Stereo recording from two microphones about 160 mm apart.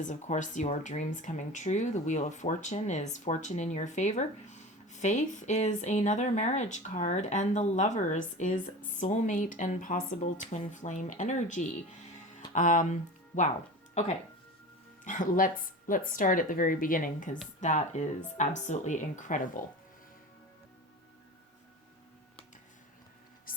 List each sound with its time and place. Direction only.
0.0 s speech: 50° left (ahead or behind)
15.0 s speech: 55° left (ahead or behind)
23.5 s a sound: 60° left (ahead or behind)